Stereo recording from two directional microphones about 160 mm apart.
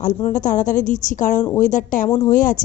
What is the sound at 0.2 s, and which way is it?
A woman's voice, 45° left (ahead or behind).